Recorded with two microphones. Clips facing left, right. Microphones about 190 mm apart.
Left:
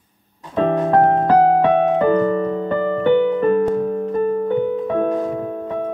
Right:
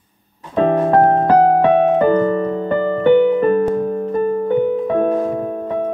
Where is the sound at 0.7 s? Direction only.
35° right (ahead or behind).